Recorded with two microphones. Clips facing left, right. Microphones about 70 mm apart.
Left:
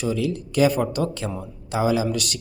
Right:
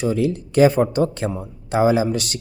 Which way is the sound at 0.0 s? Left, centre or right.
Right.